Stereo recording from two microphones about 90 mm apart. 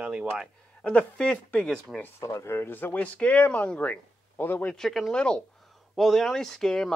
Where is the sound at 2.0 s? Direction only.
35° left (ahead or behind).